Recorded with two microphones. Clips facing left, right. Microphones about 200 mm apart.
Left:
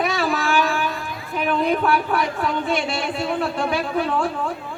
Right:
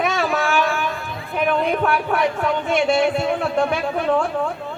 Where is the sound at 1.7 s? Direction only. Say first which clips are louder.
Even; 35° left (ahead or behind).